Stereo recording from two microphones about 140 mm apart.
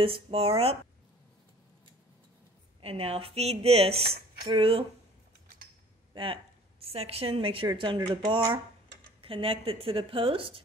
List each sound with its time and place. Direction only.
0.0 s speech: 40° right (ahead or behind)
2.8 s speech: 45° right (ahead or behind)
6.1 s a woman's voice: 40° right (ahead or behind)